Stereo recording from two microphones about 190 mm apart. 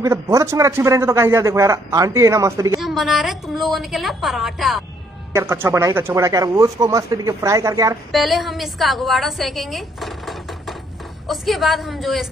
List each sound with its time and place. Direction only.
0.0 s a man's voice: 15° right (ahead or behind)
2.8 s a woman's voice: centre (ahead or behind)
5.3 s a man's voice: 15° right (ahead or behind)
8.1 s a woman's voice: centre (ahead or behind)